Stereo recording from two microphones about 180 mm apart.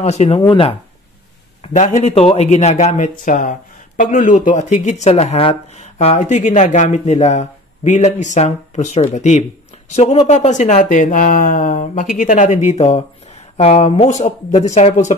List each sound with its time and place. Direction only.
0.0 s speech: 35° left (ahead or behind)
1.6 s speech: 40° left (ahead or behind)